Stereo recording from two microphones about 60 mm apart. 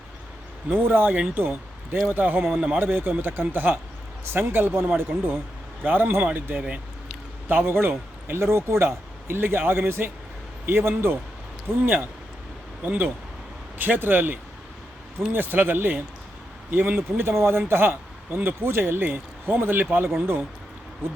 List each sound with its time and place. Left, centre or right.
0.7 s a man's voice: right
1.4 s a sound: right
2.0 s a man's voice: right